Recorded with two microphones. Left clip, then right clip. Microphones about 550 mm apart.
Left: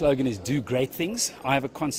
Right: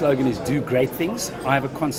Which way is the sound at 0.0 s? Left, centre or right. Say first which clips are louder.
Right 3 dB; left.